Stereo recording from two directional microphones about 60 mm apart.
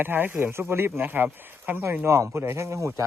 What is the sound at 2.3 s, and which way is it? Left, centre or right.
Speech, right.